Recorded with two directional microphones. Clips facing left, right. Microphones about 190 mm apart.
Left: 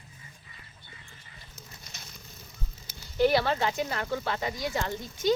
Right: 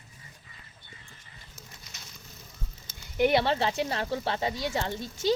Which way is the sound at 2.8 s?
20° right (ahead or behind).